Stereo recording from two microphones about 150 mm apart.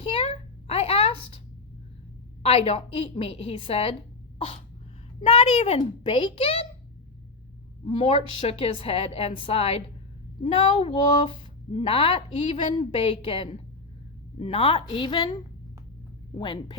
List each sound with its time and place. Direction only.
0.0 s a sound: 40° left (ahead or behind)
2.4 s a woman's voice: 40° left (ahead or behind)
5.2 s a woman's voice: 40° left (ahead or behind)
7.9 s a woman's voice: 40° left (ahead or behind)
16.4 s a woman's voice: 30° left (ahead or behind)